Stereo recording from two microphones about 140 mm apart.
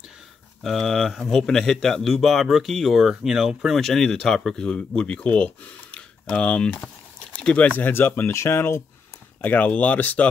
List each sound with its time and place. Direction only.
0.6 s speech: centre (ahead or behind)